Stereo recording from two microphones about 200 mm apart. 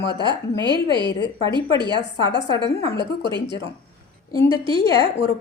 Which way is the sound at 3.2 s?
20° right (ahead or behind).